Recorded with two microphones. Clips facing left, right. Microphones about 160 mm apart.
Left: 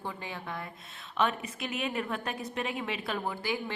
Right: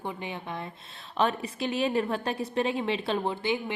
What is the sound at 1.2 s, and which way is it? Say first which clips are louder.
A woman's voice: right 3 dB; 30° right (ahead or behind).